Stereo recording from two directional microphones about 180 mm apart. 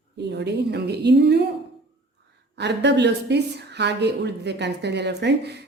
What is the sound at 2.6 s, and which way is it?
A woman's voice, 75° right (ahead or behind).